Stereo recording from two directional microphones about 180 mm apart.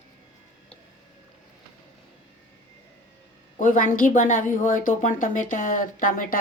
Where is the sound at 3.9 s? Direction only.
45° left (ahead or behind).